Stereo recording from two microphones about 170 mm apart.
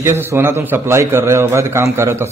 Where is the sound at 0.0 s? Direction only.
15° right (ahead or behind).